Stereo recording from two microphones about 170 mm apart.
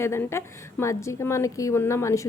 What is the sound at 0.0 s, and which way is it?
A woman's voice, 15° left (ahead or behind).